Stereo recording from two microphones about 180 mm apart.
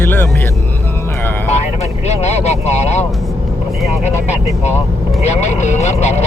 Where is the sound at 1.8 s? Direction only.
40° left (ahead or behind).